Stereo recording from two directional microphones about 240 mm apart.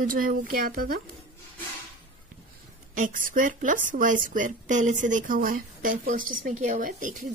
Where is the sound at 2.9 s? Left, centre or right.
Right.